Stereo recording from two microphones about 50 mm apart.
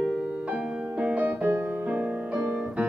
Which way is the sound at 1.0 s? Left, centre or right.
Right.